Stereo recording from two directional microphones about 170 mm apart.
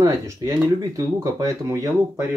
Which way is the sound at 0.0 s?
20° right (ahead or behind).